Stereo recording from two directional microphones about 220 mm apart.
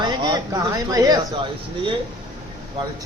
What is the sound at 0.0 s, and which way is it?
Speech, 20° right (ahead or behind).